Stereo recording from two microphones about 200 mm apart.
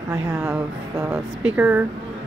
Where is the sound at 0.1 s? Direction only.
10° right (ahead or behind).